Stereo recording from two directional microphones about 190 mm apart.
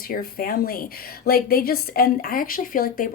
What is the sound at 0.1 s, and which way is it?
A woman's voice, 50° left (ahead or behind).